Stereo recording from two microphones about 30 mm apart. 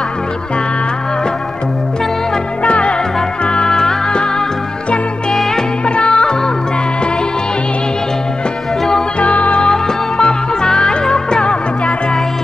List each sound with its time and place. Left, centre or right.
2.6 s music: left
3.5 s music: left
5.9 s music: left
9.2 s music: left
9.6 s music: left